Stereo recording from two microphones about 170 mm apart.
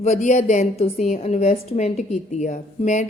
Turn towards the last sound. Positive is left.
turn(degrees=45)  # may be behind; listen again after turning